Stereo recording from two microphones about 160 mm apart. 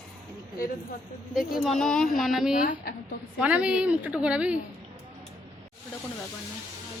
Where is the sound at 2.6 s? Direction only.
55° left (ahead or behind).